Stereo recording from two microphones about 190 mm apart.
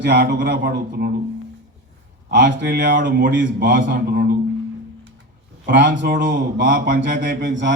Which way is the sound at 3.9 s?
50° right (ahead or behind).